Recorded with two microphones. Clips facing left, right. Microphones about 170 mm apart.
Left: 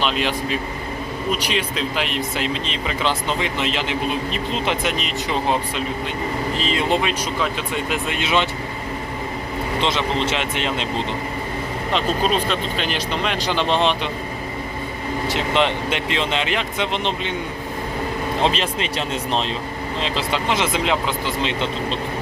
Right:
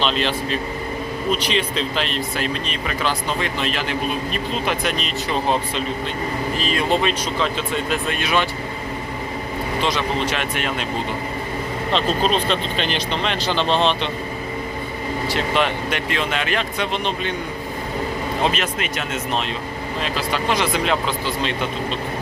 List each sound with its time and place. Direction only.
0.0 s speech: 10° left (ahead or behind)
7.0 s speech: 10° left (ahead or behind)
10.2 s speech: 20° left (ahead or behind)
11.9 s speech: 10° left (ahead or behind)
15.3 s speech: 20° left (ahead or behind)
18.4 s speech: 30° left (ahead or behind)